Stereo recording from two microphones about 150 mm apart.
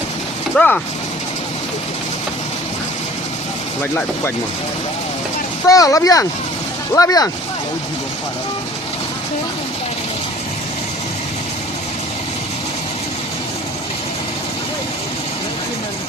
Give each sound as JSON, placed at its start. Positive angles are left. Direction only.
{"t": 0.5, "sound": "speech", "side_deg": 10}
{"t": 5.6, "sound": "speech", "side_deg": 25}